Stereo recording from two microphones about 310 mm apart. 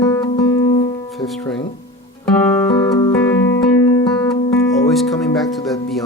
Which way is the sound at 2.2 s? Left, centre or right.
Centre.